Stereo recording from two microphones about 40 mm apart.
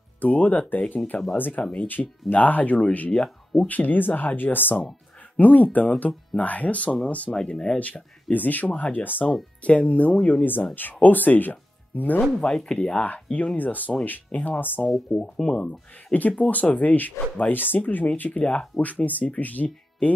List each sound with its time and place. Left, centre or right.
0.2 s speech: left
1.6 s speech: left
1.9 s speech: left
4.4 s speech: left
5.4 s speech: left
7.4 s speech: left
7.8 s speech: left
9.6 s speech: left
10.7 s speech: left
12.4 s speech: centre
13.0 s speech: left
15.3 s speech: centre
16.1 s speech: left